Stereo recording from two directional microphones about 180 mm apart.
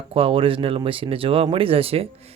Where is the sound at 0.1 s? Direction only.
30° right (ahead or behind).